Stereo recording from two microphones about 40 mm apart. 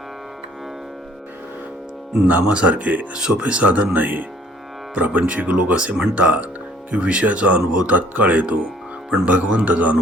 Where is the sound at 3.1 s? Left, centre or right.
Right.